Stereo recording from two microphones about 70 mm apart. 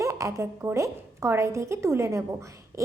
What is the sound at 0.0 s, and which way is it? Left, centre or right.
A woman's voice, right.